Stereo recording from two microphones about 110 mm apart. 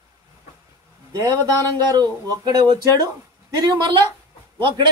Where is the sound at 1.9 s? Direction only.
35° right (ahead or behind).